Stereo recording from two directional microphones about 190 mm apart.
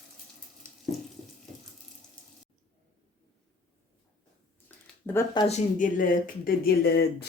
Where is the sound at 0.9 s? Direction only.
Centre (ahead or behind).